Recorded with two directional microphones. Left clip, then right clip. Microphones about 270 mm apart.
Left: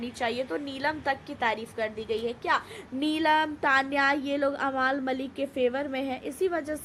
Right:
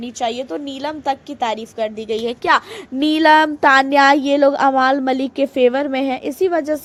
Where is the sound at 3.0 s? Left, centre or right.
Right.